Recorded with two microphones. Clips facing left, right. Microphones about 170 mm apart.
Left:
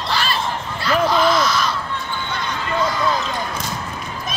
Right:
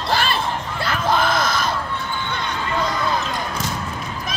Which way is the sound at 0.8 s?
55° right (ahead or behind).